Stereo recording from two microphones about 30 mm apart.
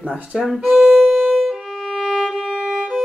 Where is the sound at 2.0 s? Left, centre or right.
Centre.